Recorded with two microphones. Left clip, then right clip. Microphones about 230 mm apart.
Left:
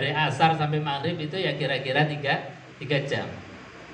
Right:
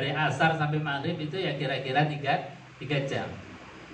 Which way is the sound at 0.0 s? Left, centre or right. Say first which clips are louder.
Left 3 dB; left.